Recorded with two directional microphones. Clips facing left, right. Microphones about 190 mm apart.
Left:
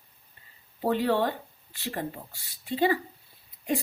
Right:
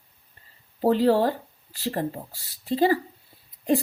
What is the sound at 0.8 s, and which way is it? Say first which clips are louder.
Speech: right 5 dB; 40° right (ahead or behind).